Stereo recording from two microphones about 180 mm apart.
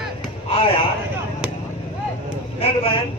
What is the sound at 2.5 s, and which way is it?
Speech, 30° left (ahead or behind).